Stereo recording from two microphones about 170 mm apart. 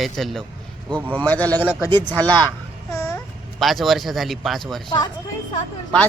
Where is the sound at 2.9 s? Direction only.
15° left (ahead or behind).